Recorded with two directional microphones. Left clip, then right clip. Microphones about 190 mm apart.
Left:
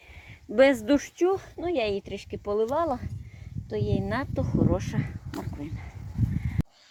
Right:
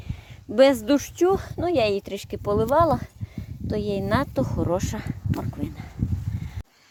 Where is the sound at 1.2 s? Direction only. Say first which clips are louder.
Right 4 dB; 35° right (ahead or behind).